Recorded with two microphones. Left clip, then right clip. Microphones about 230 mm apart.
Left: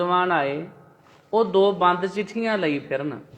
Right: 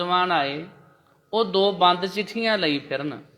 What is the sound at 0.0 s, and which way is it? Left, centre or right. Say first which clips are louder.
A man's voice: left 1 dB; right.